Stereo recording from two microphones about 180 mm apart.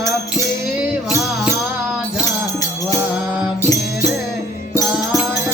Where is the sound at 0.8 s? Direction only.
5° right (ahead or behind).